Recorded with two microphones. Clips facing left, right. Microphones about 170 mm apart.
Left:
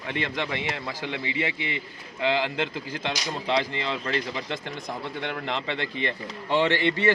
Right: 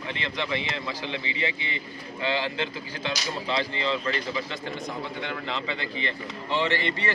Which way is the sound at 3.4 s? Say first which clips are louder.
Left 2 dB; 55° left (ahead or behind).